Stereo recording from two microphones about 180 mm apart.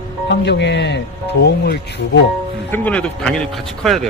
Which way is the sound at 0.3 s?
70° left (ahead or behind).